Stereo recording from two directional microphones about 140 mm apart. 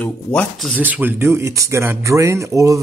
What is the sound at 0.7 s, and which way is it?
Speech, 10° right (ahead or behind).